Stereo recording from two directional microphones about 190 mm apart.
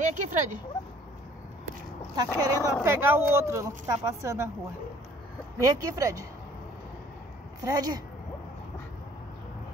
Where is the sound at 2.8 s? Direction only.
10° right (ahead or behind).